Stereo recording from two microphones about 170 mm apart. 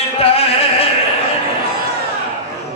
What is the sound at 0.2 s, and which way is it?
Music, 35° left (ahead or behind).